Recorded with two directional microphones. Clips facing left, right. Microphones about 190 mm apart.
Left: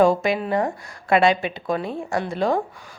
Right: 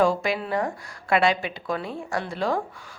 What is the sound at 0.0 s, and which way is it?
A woman's voice, 20° left (ahead or behind).